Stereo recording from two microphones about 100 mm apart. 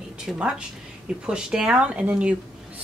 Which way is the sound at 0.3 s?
10° right (ahead or behind).